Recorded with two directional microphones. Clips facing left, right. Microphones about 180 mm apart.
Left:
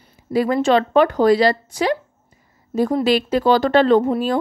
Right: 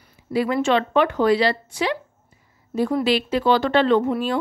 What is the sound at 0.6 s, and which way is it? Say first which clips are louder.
A woman's voice: left 6 dB; 40° left (ahead or behind).